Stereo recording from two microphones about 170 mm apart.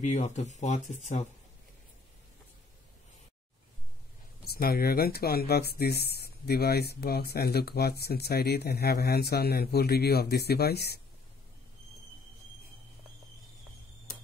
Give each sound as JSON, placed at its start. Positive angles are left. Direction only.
{"t": 0.0, "sound": "speech", "side_deg": 45}
{"t": 4.5, "sound": "speech", "side_deg": 65}